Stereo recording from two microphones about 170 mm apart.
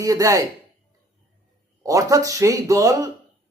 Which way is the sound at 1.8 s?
20° right (ahead or behind).